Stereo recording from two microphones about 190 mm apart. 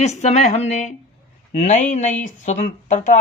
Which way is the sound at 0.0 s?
35° left (ahead or behind).